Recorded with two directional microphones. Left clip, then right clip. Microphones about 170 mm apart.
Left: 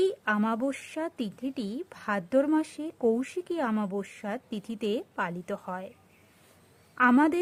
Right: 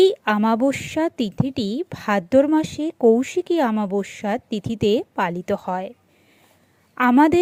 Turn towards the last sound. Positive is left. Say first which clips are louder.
# right 7 dB
turn(degrees=-35)  # may be behind; listen again after turning